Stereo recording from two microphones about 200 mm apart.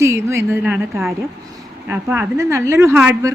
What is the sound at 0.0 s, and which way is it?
Speech, 15° right (ahead or behind).